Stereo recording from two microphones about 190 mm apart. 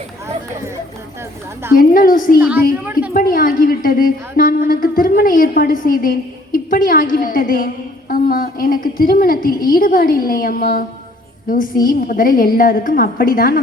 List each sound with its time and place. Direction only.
1.7 s a woman's voice: 50° left (ahead or behind)